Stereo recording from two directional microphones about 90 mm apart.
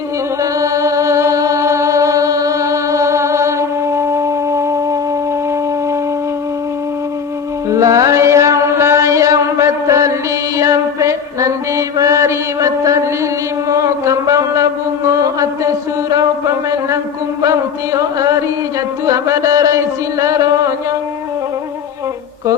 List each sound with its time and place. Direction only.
0.6 s music: 35° right (ahead or behind)
7.7 s music: 35° right (ahead or behind)
10.6 s mantra: 35° right (ahead or behind)
17.4 s a sound: 35° right (ahead or behind)